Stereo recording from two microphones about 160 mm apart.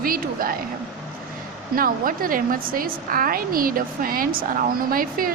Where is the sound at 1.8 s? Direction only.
60° right (ahead or behind).